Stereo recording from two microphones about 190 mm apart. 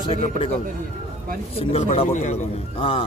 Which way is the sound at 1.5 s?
35° left (ahead or behind).